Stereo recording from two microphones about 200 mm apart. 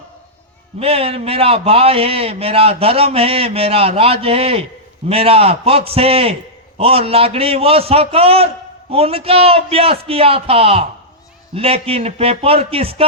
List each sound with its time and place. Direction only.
0.8 s a man's voice: 30° right (ahead or behind)